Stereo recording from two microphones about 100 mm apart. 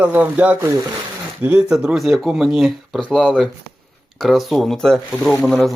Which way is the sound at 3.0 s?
10° left (ahead or behind).